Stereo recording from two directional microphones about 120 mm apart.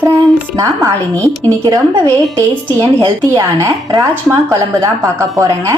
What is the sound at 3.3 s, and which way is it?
A woman's voice, 25° right (ahead or behind).